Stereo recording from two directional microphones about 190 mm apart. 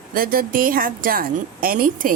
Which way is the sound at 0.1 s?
50° right (ahead or behind).